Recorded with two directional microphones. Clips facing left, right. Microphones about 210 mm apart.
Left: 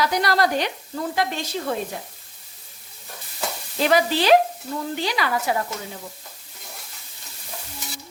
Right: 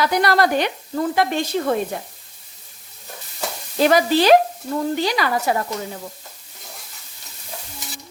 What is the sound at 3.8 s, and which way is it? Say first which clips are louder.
Sizzle: right 4 dB; 45° right (ahead or behind).